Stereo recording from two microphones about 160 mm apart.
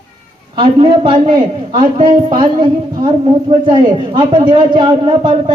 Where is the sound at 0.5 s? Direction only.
30° right (ahead or behind).